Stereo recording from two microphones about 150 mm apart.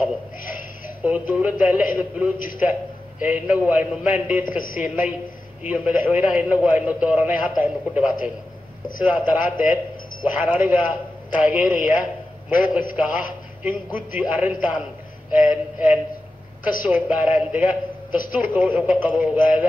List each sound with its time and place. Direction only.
1.0 s a man's voice: 10° right (ahead or behind)
4.6 s a woman's voice: 65° left (ahead or behind)
4.8 s a man's voice: 10° right (ahead or behind)